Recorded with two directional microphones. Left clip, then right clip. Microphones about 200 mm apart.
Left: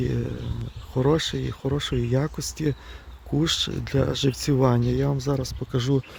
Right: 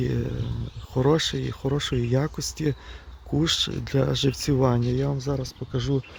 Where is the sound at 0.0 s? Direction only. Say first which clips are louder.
Even; centre (ahead or behind).